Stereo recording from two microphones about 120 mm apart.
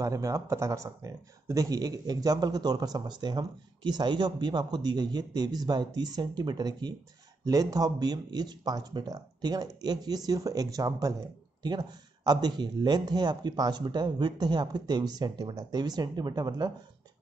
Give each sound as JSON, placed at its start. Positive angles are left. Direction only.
{"t": 0.0, "sound": "speech", "side_deg": -25}